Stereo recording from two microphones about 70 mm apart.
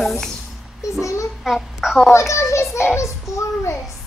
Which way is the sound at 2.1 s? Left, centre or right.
Left.